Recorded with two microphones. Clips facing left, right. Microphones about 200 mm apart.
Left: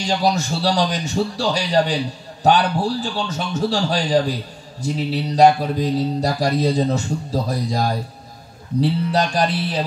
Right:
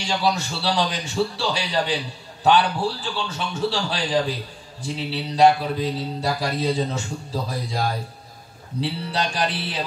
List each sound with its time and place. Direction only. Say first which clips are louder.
0.0 s mantra: left 4 dB; 45° left (ahead or behind)
9.1 s mantra: left 6 dB; 45° left (ahead or behind)